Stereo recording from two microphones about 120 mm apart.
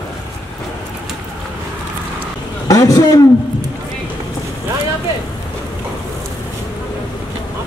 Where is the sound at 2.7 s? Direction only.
30° left (ahead or behind).